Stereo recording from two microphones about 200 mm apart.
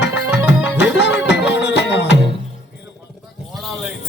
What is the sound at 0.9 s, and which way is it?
Music, 60° left (ahead or behind).